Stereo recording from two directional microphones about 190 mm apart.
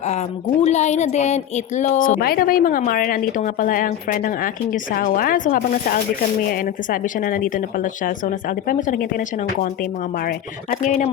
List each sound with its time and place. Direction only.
0.6 s speech: 35° left (ahead or behind)